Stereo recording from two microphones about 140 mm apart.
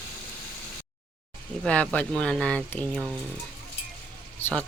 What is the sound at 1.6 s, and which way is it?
Speech, 5° left (ahead or behind).